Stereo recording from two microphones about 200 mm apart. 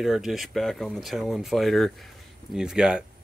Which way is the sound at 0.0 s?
Centre (ahead or behind).